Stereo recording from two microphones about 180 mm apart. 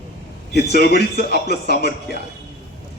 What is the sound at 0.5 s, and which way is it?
Speech, 65° left (ahead or behind).